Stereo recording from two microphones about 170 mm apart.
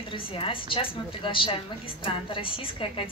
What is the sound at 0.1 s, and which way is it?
A woman's voice, 30° left (ahead or behind).